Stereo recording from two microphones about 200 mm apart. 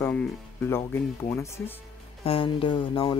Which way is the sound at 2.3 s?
25° left (ahead or behind).